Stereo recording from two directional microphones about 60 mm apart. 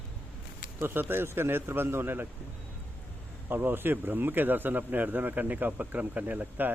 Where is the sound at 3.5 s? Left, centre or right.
Right.